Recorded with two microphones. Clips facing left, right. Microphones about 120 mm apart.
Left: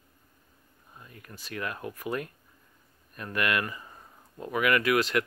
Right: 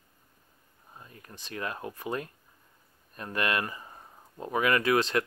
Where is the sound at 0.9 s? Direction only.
30° right (ahead or behind).